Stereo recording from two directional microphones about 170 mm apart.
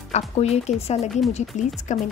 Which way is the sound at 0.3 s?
35° left (ahead or behind).